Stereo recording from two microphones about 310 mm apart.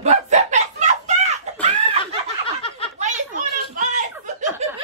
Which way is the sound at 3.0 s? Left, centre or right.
Right.